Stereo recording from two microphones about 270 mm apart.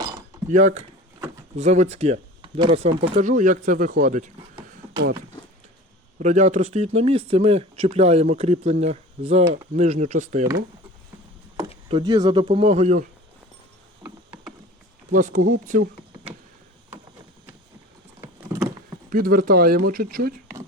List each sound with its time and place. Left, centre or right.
0.5 s speech: right
6.1 s speech: right
11.5 s speech: centre
15.1 s speech: right
18.2 s vehicle: centre
19.1 s speech: right